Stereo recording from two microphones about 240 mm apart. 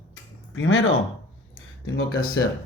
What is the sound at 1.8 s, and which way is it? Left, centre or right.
Speech, left.